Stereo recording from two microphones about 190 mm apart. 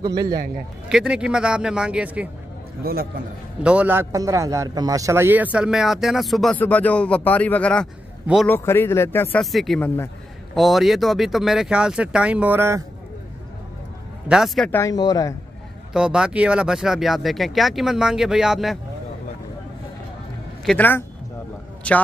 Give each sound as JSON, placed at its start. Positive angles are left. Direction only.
{"t": 0.8, "sound": "speech", "side_deg": -5}
{"t": 2.8, "sound": "a man's voice", "side_deg": -55}
{"t": 3.6, "sound": "speech", "side_deg": -5}
{"t": 9.4, "sound": "speech", "side_deg": 0}
{"t": 14.3, "sound": "speech", "side_deg": 0}
{"t": 14.8, "sound": "speech", "side_deg": 20}
{"t": 15.9, "sound": "speech", "side_deg": -5}
{"t": 20.6, "sound": "speech", "side_deg": 10}